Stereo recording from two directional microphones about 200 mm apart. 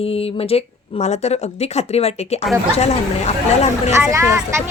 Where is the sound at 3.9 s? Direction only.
15° right (ahead or behind).